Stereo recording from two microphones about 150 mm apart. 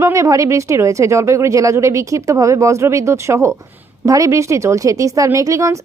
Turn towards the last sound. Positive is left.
turn(degrees=-20)  # may be behind; listen again after turning